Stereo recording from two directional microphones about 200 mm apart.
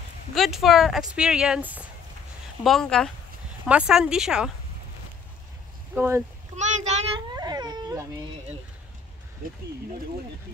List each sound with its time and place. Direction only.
0.3 s speech: centre (ahead or behind)
5.9 s speech: 10° right (ahead or behind)
6.5 s child singing: 35° right (ahead or behind)
7.3 s a sound: 20° right (ahead or behind)
9.4 s speech: 45° right (ahead or behind)